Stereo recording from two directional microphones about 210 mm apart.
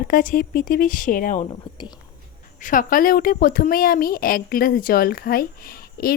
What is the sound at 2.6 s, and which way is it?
A woman's voice, 40° left (ahead or behind).